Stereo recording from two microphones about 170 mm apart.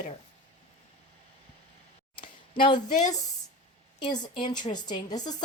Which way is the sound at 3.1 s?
20° left (ahead or behind).